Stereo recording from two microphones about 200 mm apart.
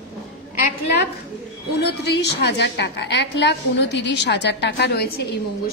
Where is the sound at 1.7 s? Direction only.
55° left (ahead or behind).